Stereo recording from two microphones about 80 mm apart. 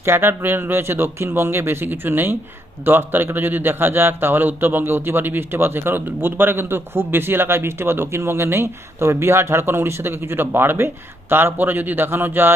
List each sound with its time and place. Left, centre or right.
0.0 s a man's voice: right